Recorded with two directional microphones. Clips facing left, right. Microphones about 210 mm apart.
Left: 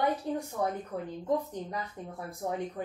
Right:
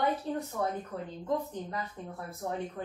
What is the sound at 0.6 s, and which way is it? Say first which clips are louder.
A woman's voice: left 1 dB; 15° left (ahead or behind).